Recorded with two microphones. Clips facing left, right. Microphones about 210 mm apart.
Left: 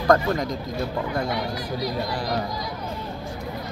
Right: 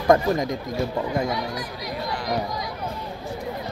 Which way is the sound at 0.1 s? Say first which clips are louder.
Right 2 dB; 20° right (ahead or behind).